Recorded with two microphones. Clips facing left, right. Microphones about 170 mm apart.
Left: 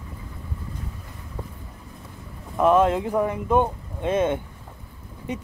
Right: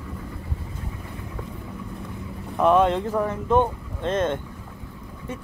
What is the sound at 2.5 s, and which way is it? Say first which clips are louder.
Speech: even; centre (ahead or behind).